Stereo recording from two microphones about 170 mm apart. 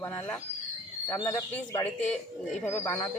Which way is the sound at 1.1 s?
25° left (ahead or behind).